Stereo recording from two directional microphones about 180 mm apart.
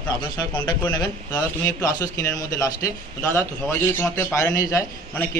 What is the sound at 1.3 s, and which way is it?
A man's voice, 15° left (ahead or behind).